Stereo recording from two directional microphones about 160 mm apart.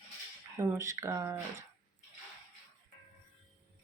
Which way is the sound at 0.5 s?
15° right (ahead or behind).